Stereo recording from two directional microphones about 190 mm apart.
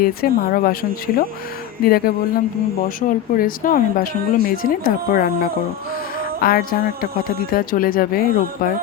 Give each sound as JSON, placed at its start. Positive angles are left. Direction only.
{"t": 0.0, "sound": "speech", "side_deg": 50}